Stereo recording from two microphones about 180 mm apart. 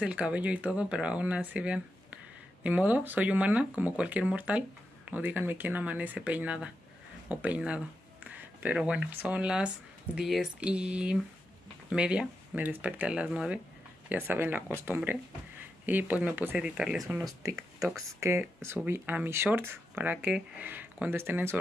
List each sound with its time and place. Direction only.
0.0 s speech: 5° right (ahead or behind)
17.2 s speech: 20° right (ahead or behind)
17.6 s speech: centre (ahead or behind)
18.2 s speech: 15° right (ahead or behind)